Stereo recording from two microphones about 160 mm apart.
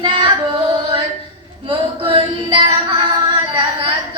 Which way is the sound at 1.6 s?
35° right (ahead or behind).